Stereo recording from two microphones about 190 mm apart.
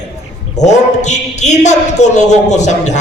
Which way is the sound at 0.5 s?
40° left (ahead or behind).